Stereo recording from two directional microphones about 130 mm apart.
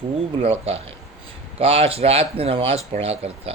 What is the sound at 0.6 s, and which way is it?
Speech, 50° right (ahead or behind).